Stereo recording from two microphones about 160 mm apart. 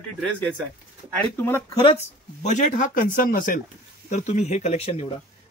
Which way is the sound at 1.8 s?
45° left (ahead or behind).